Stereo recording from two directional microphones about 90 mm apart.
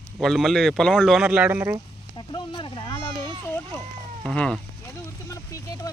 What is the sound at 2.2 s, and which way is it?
Speech, 60° left (ahead or behind).